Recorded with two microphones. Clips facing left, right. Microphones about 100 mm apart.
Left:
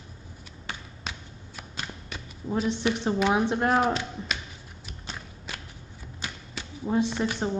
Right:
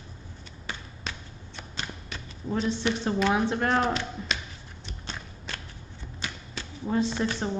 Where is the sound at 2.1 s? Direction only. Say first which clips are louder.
Left 1 dB; 5° left (ahead or behind).